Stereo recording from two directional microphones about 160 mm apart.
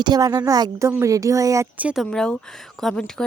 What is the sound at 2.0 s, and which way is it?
Speech, 5° left (ahead or behind).